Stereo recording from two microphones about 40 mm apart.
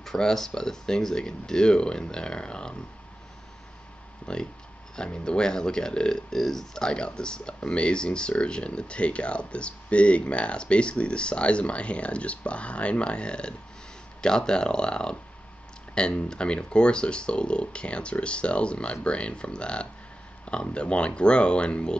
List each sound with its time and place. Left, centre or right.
0.0 s speech: centre
4.3 s speech: left